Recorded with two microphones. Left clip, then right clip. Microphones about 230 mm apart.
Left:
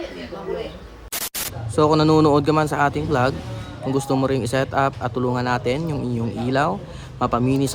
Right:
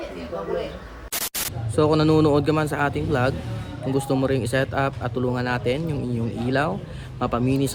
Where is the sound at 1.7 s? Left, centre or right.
Centre.